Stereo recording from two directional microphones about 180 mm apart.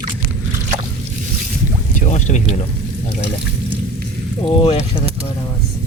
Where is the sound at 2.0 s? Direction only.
40° left (ahead or behind).